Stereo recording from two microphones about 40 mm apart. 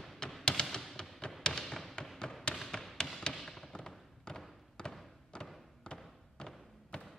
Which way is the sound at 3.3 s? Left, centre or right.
Centre.